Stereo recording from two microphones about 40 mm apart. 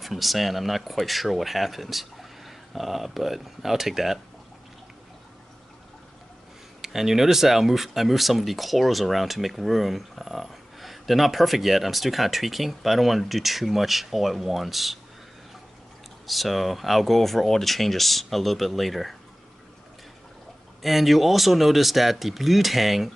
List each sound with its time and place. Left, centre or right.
0.0 s speech: centre
6.8 s speech: centre
16.3 s speech: centre
20.8 s speech: centre